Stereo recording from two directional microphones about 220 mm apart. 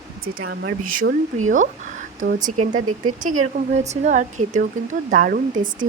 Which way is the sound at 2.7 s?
90° right.